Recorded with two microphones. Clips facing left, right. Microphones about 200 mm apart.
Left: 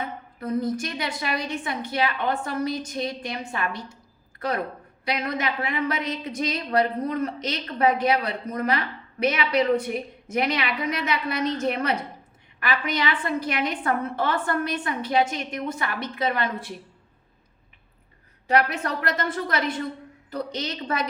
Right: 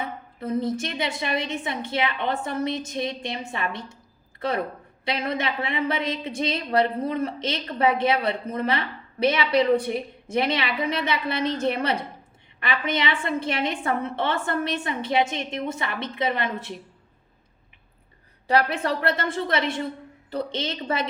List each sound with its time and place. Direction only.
0.3 s a woman's voice: 25° right (ahead or behind)
18.4 s a woman's voice: 30° right (ahead or behind)